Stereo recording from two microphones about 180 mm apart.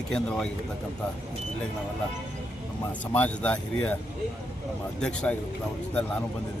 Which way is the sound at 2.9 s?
10° left (ahead or behind).